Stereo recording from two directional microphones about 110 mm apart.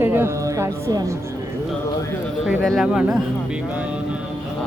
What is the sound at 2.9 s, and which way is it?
Speech, 5° right (ahead or behind).